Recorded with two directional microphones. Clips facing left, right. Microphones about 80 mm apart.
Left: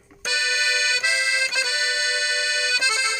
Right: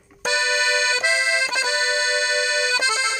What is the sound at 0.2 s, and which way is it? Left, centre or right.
Accordion, right.